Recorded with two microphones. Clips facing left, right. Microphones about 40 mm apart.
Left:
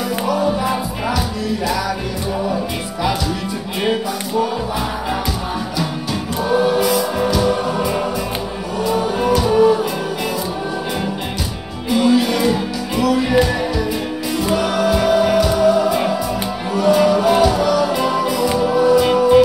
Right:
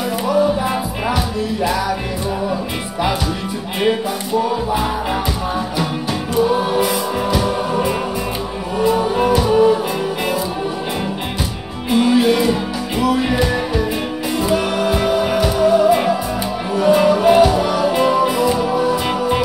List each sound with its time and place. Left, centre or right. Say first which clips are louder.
0.3 s music: right 2 dB; centre
6.6 s music: left 2 dB; centre
8.8 s music: right 2 dB; right
9.5 s music: left 1 dB; centre
11.9 s music: right 1 dB; right
14.5 s music: left 2 dB; centre
18.6 s music: left 4 dB; centre